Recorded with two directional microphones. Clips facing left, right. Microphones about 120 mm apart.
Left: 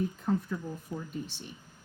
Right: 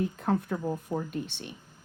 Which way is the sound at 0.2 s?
65° right (ahead or behind).